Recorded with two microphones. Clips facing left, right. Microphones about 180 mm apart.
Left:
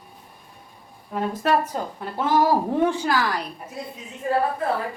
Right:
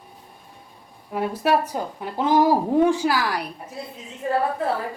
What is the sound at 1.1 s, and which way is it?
A woman's voice, 10° right (ahead or behind).